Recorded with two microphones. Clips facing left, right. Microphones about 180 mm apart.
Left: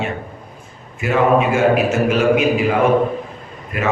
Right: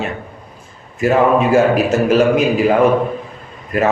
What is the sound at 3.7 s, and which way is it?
Speech, 40° right (ahead or behind).